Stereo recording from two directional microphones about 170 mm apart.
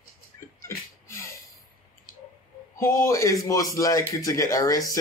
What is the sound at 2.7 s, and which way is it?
A man's voice, 15° left (ahead or behind).